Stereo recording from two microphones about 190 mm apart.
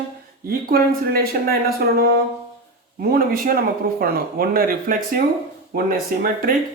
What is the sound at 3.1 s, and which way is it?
Speech, 50° right (ahead or behind).